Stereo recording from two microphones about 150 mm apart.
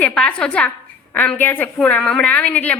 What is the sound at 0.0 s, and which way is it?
A woman's voice, 5° left (ahead or behind).